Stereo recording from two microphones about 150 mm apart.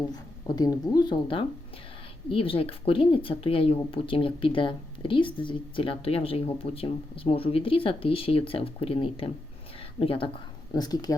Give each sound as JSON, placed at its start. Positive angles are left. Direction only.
{"t": 0.1, "sound": "a woman's voice", "side_deg": 25}
{"t": 10.8, "sound": "speech", "side_deg": 25}